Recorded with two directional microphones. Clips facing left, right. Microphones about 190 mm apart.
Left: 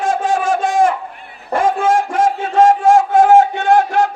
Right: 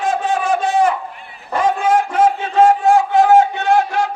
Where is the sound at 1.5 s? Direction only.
50° left (ahead or behind).